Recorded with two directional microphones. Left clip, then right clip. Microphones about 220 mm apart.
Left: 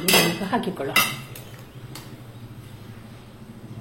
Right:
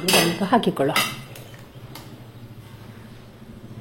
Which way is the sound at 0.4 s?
40° right (ahead or behind).